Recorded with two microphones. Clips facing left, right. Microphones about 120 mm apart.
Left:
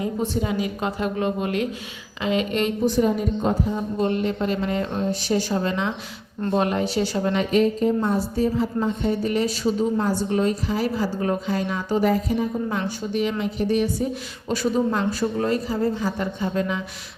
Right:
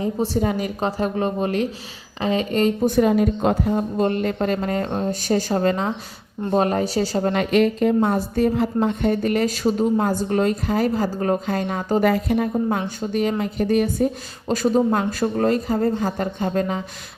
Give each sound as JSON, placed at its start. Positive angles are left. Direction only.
{"t": 0.0, "sound": "speech", "side_deg": -35}
{"t": 0.4, "sound": "speech", "side_deg": -45}
{"t": 2.9, "sound": "a woman's voice", "side_deg": -80}
{"t": 7.3, "sound": "a woman's voice", "side_deg": -70}
{"t": 12.7, "sound": "speech", "side_deg": -50}